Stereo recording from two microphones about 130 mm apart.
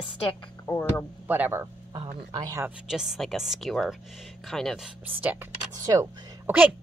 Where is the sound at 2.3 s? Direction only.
30° right (ahead or behind).